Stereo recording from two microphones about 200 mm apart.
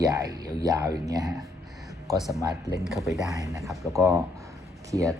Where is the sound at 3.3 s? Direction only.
15° right (ahead or behind).